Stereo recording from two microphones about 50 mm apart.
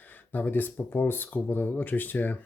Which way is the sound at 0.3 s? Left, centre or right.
Left.